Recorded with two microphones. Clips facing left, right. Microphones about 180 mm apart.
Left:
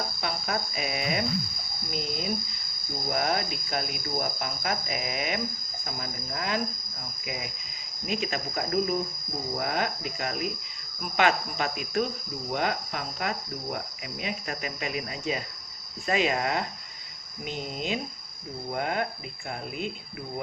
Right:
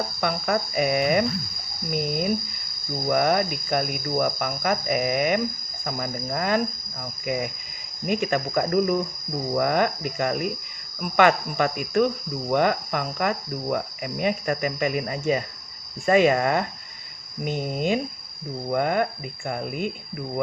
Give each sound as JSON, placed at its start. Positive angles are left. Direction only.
{"t": 0.2, "sound": "speech", "side_deg": -55}